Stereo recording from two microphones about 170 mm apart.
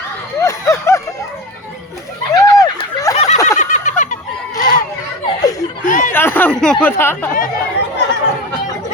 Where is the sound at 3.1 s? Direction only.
40° left (ahead or behind).